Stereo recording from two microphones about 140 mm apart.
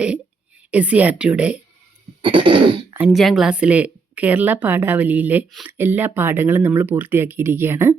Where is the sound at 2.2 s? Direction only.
35° right (ahead or behind).